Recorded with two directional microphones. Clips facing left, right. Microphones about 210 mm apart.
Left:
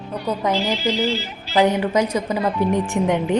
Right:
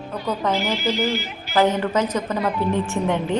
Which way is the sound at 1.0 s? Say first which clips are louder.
Left 1 dB; 30° left (ahead or behind).